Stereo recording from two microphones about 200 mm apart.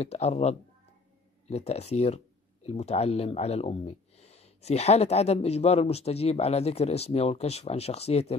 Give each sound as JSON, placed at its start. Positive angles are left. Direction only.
{"t": 0.0, "sound": "speech", "side_deg": 30}